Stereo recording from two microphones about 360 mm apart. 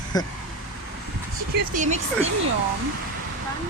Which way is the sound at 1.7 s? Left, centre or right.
Right.